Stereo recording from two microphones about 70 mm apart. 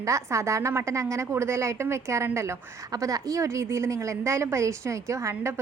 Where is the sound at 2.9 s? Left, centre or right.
Right.